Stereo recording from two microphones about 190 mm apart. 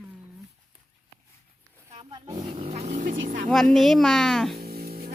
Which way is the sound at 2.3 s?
25° right (ahead or behind).